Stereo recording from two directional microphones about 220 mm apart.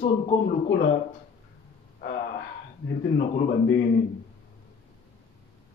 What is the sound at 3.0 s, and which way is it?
Speech, 55° left (ahead or behind).